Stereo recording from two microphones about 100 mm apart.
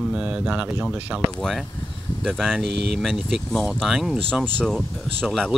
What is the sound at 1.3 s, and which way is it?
Speech, 5° left (ahead or behind).